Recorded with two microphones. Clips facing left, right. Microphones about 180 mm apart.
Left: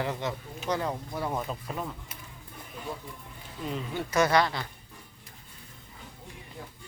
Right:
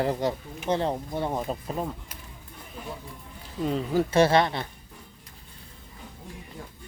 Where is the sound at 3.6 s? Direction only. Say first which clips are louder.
Right 8 dB; 40° right (ahead or behind).